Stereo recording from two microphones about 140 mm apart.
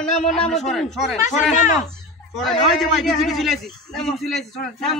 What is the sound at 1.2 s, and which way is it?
Speech, 60° left (ahead or behind).